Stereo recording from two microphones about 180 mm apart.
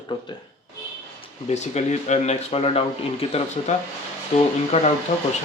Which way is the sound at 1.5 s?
40° left (ahead or behind).